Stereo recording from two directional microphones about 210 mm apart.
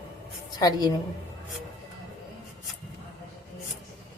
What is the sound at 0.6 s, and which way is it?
Speech, 20° left (ahead or behind).